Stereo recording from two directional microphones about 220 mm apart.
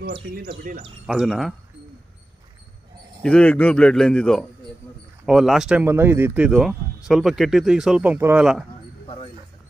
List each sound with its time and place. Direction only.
0.5 s speech: 40° right (ahead or behind)
1.0 s speech: 5° right (ahead or behind)
3.2 s speech: 5° left (ahead or behind)
9.0 s a sound: 25° left (ahead or behind)